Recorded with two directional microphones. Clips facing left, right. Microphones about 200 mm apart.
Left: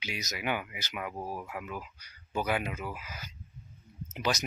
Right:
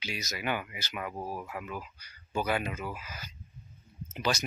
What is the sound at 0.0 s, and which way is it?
Speech, 15° left (ahead or behind).